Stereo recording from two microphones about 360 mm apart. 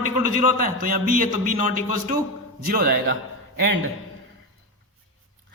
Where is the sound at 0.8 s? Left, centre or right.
Right.